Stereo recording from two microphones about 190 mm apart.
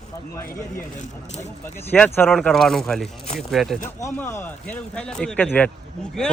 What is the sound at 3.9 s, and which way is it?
A man's voice, 15° left (ahead or behind).